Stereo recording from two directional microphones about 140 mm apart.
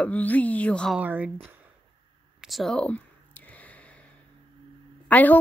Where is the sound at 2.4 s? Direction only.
Centre (ahead or behind).